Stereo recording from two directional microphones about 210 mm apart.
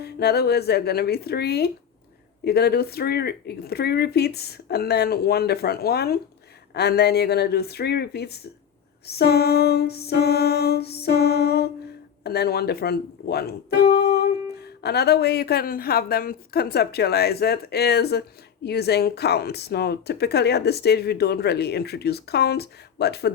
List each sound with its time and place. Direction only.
0.0 s speech: 50° left (ahead or behind)